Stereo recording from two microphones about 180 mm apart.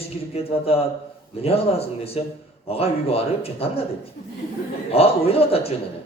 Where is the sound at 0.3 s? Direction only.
35° left (ahead or behind).